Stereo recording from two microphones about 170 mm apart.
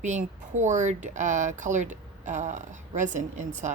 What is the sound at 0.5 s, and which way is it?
Speech, 45° right (ahead or behind).